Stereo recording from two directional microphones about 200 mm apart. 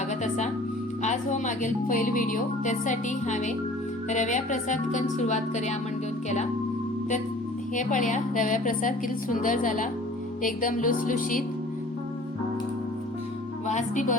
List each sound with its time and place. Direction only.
0.2 s music: 35° left (ahead or behind)
1.0 s speech: 35° left (ahead or behind)
7.8 s speech: 40° left (ahead or behind)
13.7 s speech: 40° left (ahead or behind)